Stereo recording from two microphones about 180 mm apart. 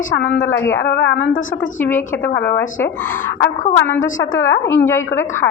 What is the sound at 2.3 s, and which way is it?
Speech, 70° left (ahead or behind).